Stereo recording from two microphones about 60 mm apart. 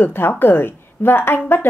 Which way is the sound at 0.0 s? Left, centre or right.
Left.